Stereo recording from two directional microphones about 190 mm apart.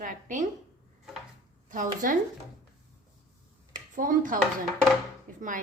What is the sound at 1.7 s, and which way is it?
Speech, 45° right (ahead or behind).